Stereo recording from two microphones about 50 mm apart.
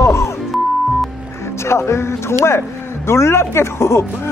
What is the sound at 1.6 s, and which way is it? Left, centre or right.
Speech, left.